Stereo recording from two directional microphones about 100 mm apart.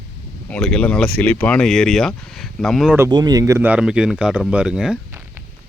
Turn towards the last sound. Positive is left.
turn(degrees=-10)  # may be behind; listen again after turning